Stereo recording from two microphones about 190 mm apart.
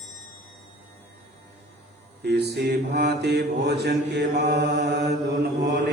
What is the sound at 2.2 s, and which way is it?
Mantra, 60° right (ahead or behind).